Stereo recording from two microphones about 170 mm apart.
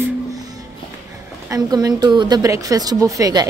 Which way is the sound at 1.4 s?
20° right (ahead or behind).